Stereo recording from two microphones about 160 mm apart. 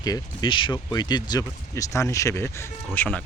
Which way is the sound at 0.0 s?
25° left (ahead or behind).